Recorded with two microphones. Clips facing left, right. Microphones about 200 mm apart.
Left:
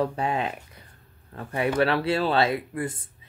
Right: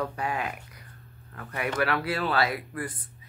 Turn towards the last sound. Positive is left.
turn(degrees=25)  # may be behind; listen again after turning